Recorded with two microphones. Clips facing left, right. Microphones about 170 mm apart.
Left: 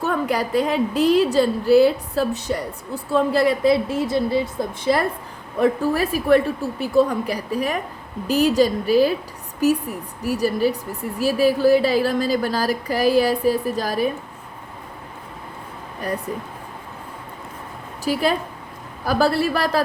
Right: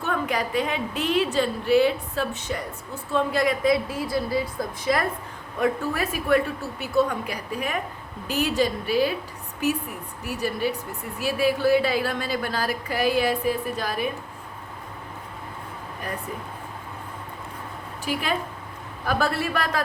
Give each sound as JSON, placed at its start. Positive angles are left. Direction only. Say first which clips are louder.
{"t": 0.0, "sound": "a woman's voice", "louder": "left 4 dB", "side_deg": 40}
{"t": 18.0, "sound": "a woman's voice", "louder": "left 6 dB", "side_deg": 35}